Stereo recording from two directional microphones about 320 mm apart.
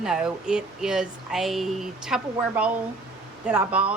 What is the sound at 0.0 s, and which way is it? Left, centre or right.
Speech, centre.